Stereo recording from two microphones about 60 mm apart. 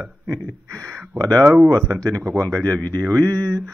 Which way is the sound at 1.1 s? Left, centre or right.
Right.